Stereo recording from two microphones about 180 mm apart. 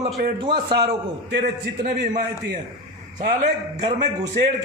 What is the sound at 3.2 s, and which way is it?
Speech, 50° right (ahead or behind).